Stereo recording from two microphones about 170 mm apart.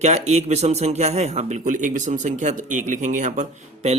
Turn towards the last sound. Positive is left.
turn(degrees=-45)  # may be behind; listen again after turning